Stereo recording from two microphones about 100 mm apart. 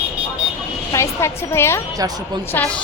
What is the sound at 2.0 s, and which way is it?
Speech, 35° right (ahead or behind).